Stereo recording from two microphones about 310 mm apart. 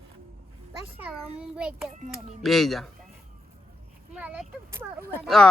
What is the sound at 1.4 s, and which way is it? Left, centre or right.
Speech, centre.